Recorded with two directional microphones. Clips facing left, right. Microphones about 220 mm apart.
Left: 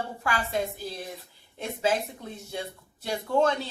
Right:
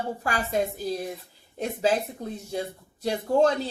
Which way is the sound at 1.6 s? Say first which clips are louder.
Right 3 dB; 40° right (ahead or behind).